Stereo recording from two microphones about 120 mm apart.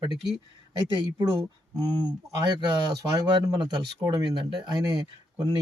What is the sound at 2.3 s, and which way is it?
Speech, 35° right (ahead or behind).